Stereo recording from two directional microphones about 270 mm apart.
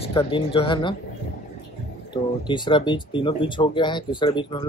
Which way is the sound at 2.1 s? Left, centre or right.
Centre.